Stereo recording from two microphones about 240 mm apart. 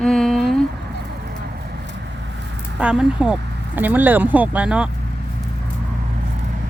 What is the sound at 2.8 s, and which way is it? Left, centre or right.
Speech, centre.